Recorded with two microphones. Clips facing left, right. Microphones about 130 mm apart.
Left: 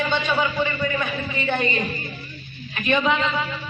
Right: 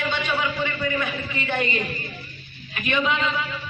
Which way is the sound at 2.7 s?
30° left (ahead or behind).